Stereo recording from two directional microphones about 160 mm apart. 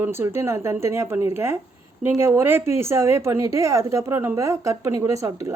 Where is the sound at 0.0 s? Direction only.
15° right (ahead or behind).